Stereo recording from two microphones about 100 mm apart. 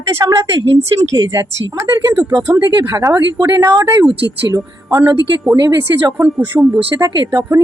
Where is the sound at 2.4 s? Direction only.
20° right (ahead or behind).